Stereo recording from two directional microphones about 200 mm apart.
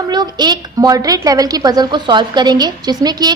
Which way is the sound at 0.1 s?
20° right (ahead or behind).